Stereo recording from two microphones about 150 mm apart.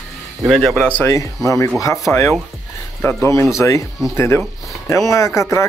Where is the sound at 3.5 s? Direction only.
20° left (ahead or behind).